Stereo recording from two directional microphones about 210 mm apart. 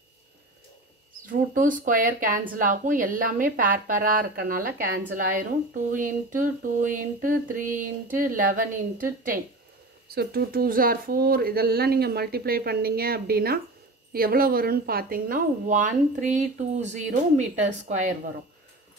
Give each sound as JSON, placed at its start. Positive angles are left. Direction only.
{"t": 1.2, "sound": "speech", "side_deg": -40}